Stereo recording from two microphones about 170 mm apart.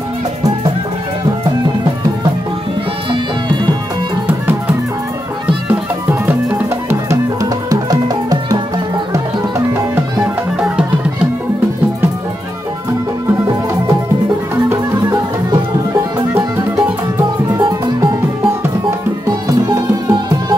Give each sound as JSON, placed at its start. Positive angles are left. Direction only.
{"t": 4.3, "sound": "music", "side_deg": -10}
{"t": 10.2, "sound": "music", "side_deg": -5}
{"t": 14.5, "sound": "music", "side_deg": -15}
{"t": 16.3, "sound": "music", "side_deg": -15}